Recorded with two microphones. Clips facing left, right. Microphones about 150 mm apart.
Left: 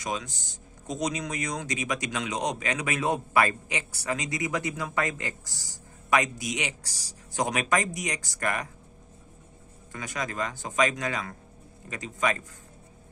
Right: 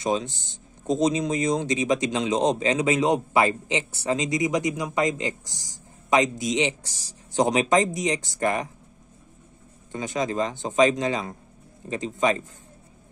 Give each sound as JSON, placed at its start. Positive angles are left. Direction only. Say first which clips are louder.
{"t": 0.0, "sound": "speech", "louder": "right 8 dB", "side_deg": -25}
{"t": 9.9, "sound": "speech", "louder": "right 7 dB", "side_deg": -25}